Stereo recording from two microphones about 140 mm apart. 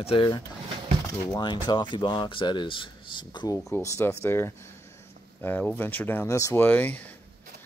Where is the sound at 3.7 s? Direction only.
20° left (ahead or behind).